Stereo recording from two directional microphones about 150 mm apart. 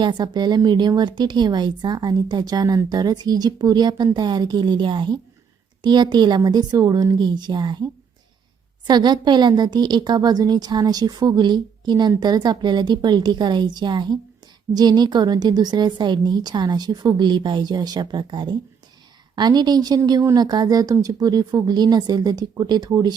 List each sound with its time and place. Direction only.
0.0 s a woman's voice: 30° right (ahead or behind)
8.9 s a woman's voice: 30° right (ahead or behind)